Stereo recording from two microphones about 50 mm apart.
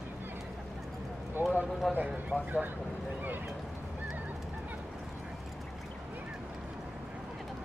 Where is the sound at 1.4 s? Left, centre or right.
Right.